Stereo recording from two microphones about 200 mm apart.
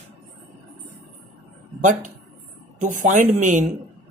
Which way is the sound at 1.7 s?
40° right (ahead or behind).